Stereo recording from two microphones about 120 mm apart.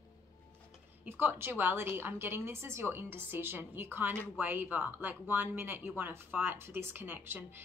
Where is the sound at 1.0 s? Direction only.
15° right (ahead or behind).